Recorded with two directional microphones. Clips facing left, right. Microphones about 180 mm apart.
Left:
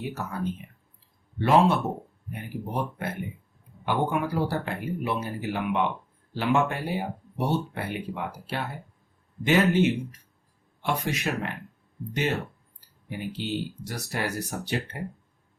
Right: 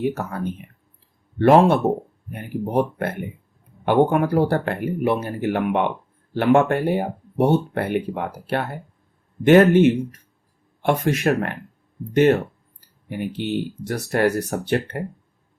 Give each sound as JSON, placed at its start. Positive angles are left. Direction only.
{"t": 0.0, "sound": "speech", "side_deg": -55}